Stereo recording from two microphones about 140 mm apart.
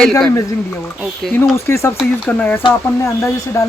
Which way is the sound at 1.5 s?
20° left (ahead or behind).